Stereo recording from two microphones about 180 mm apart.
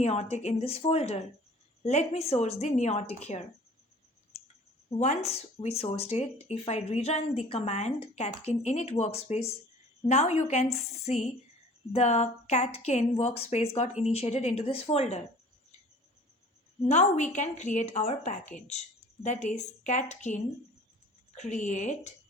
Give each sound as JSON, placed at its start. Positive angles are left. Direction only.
{"t": 0.0, "sound": "speech", "side_deg": 35}
{"t": 4.9, "sound": "speech", "side_deg": 40}
{"t": 16.8, "sound": "speech", "side_deg": 40}